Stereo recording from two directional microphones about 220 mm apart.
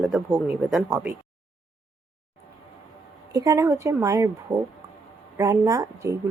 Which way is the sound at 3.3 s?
15° right (ahead or behind).